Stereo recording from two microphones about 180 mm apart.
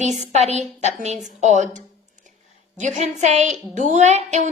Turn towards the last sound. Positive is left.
turn(degrees=-40)  # may be behind; listen again after turning